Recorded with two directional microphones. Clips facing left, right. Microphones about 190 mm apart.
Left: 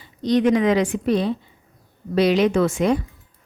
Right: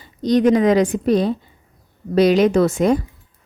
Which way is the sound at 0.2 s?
40° right (ahead or behind).